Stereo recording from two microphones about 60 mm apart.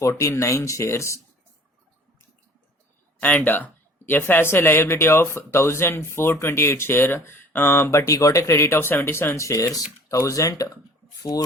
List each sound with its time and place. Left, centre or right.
0.2 s speech: left
3.2 s speech: left
11.2 s speech: left